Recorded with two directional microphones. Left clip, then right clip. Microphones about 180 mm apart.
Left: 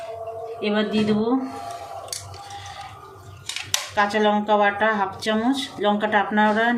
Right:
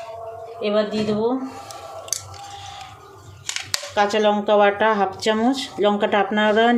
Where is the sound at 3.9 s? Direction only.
35° right (ahead or behind).